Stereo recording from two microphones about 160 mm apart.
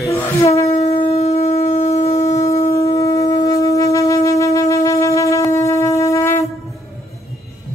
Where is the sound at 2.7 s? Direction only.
20° left (ahead or behind).